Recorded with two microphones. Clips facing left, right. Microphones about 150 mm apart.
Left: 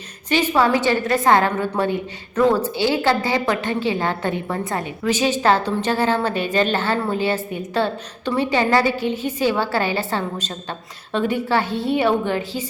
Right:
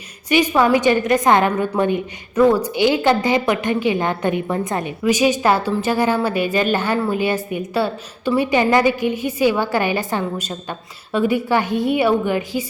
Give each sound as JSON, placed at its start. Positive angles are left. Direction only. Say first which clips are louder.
{"t": 0.3, "sound": "a woman's voice", "louder": "right 2 dB", "side_deg": -15}